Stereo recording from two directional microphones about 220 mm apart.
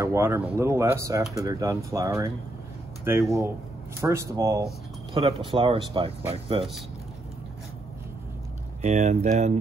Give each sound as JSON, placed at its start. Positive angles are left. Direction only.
{"t": 0.0, "sound": "speech", "side_deg": -10}
{"t": 8.8, "sound": "speech", "side_deg": -30}